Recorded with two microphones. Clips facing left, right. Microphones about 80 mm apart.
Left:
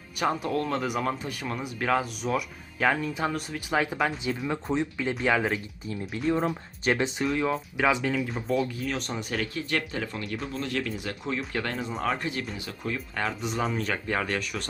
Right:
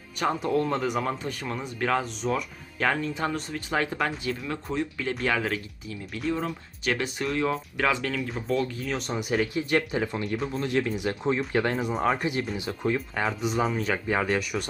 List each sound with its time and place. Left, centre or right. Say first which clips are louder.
0.2 s speech: right 2 dB; centre
4.7 s speech: even; left
5.9 s speech: left 3 dB; left
6.9 s speech: left 2 dB; centre
7.3 s speech: even; centre
9.3 s speech: right 5 dB; centre
13.1 s speech: right 3 dB; centre